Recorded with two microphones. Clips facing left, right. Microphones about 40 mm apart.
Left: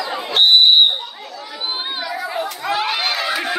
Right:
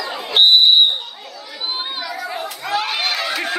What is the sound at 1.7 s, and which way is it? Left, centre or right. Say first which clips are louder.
Chatter: left 1 dB; centre.